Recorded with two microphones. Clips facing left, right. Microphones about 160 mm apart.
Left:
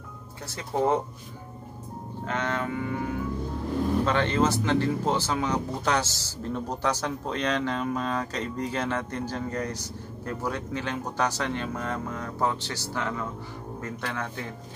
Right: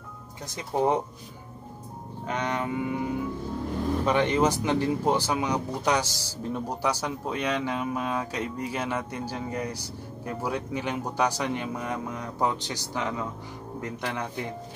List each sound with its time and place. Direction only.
0.5 s speech: 15° right (ahead or behind)
2.2 s speech: 15° right (ahead or behind)